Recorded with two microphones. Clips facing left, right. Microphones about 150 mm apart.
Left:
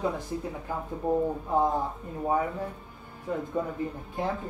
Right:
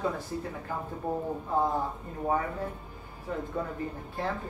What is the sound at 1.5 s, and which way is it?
Speech, 15° left (ahead or behind).